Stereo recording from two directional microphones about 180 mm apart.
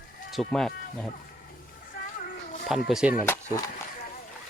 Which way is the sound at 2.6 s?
Centre (ahead or behind).